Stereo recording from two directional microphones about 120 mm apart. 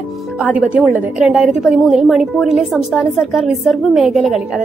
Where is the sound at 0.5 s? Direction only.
10° right (ahead or behind).